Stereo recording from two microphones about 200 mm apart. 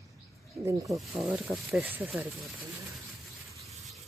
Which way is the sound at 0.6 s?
15° right (ahead or behind).